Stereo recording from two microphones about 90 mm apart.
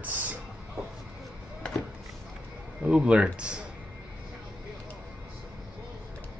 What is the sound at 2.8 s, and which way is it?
Speech, 10° right (ahead or behind).